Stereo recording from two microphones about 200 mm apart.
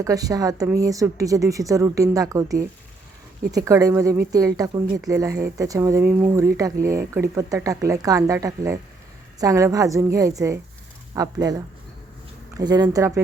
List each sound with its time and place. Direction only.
0.0 s a woman's voice: 20° right (ahead or behind)